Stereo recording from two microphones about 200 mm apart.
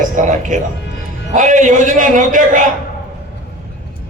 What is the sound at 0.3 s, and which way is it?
A man's voice, 40° right (ahead or behind).